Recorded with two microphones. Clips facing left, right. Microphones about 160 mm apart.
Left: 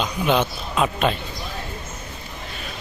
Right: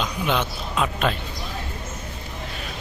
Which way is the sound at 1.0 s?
Centre (ahead or behind).